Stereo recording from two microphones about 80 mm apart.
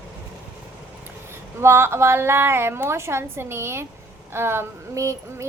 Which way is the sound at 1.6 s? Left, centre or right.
Right.